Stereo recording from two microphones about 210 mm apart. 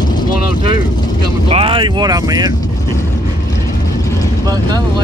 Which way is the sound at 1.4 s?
25° right (ahead or behind).